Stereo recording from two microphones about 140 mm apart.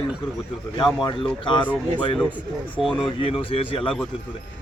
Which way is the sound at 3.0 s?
40° left (ahead or behind).